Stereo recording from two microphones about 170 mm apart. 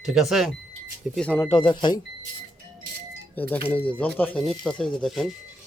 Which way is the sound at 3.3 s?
10° left (ahead or behind).